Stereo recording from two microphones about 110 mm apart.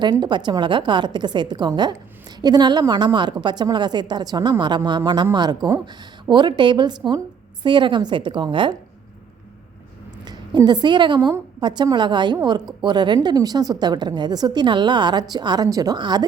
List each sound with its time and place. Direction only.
0.0 s a woman's voice: 40° right (ahead or behind)
10.2 s a woman's voice: 40° right (ahead or behind)